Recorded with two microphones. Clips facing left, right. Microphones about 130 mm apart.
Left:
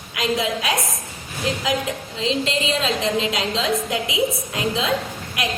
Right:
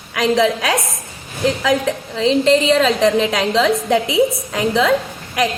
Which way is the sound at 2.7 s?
90° right.